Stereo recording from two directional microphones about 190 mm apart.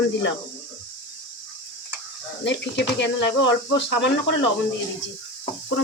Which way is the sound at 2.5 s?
65° left (ahead or behind).